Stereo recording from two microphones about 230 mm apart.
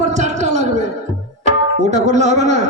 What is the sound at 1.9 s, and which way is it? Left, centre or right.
Speech, right.